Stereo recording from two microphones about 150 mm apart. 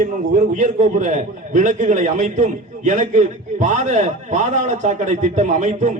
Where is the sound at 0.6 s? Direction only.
55° right (ahead or behind).